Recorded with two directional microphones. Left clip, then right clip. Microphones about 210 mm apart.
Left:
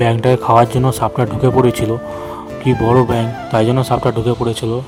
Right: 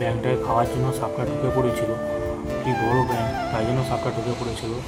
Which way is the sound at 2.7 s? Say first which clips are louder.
Left 9 dB; centre (ahead or behind).